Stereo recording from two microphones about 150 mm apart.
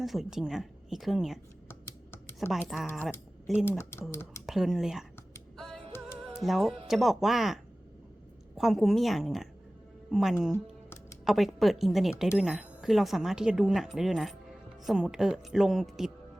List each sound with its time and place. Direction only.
0.0 s speech: centre (ahead or behind)
2.5 s speech: centre (ahead or behind)
5.8 s music: 40° right (ahead or behind)
6.3 s speech: centre (ahead or behind)